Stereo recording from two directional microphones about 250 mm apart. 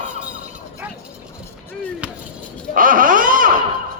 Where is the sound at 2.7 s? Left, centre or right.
Right.